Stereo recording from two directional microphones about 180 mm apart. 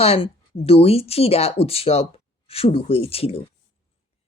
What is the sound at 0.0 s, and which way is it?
Speech, 35° left (ahead or behind).